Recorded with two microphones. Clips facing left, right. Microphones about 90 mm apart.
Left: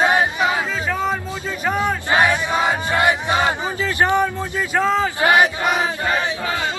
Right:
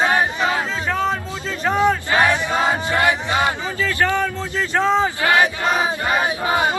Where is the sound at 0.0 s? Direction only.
15° left (ahead or behind).